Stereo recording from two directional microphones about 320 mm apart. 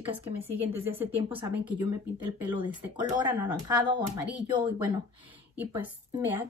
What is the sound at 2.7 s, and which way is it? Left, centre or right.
A woman's voice, centre.